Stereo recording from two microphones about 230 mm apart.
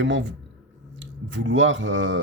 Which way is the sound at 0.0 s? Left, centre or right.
Right.